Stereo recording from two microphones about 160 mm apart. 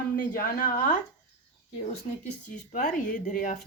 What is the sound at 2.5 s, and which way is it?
Speech, 55° left (ahead or behind).